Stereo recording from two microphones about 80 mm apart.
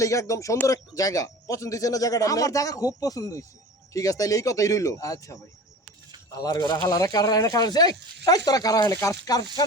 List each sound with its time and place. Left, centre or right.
0.0 s speech: left
6.4 s speech: left